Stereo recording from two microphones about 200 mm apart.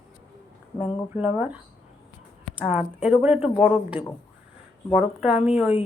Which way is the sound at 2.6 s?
5° right (ahead or behind).